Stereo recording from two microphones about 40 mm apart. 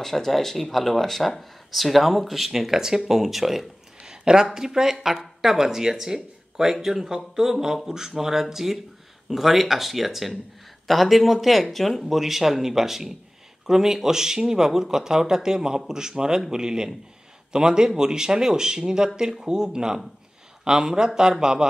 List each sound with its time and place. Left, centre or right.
0.0 s speech: centre
4.0 s a sound: centre
4.6 s speech: centre